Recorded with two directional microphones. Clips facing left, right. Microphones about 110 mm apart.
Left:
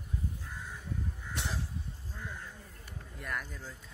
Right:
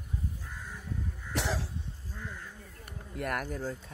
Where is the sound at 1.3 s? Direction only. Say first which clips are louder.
Right 7 dB; 90° right.